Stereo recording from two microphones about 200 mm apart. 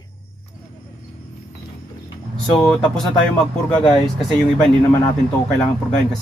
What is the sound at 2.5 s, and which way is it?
Speech, 5° left (ahead or behind).